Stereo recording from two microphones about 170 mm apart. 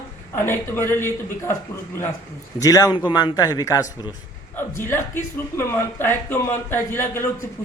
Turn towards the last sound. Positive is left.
turn(degrees=15)  # may be behind; listen again after turning